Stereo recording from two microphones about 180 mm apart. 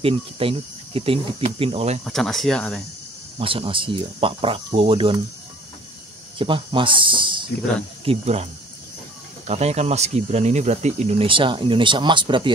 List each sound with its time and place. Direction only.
0.0 s speech: 30° right (ahead or behind)
2.0 s speech: centre (ahead or behind)
3.3 s speech: 30° right (ahead or behind)
6.3 s speech: 30° right (ahead or behind)
9.5 s speech: 35° right (ahead or behind)